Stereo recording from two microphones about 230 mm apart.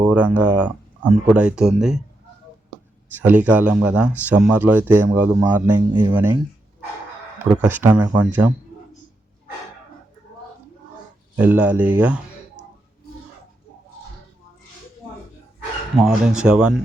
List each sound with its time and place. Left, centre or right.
0.0 s speech: centre
3.2 s speech: centre
7.3 s speech: centre
11.3 s speech: centre
16.0 s speech: centre